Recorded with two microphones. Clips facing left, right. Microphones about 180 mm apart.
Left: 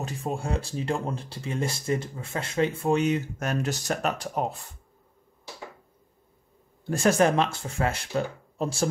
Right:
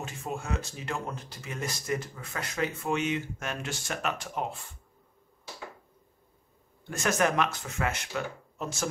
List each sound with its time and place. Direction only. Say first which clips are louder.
0.0 s speech: left 5 dB; 35° left (ahead or behind)
6.9 s speech: left 6 dB; 30° left (ahead or behind)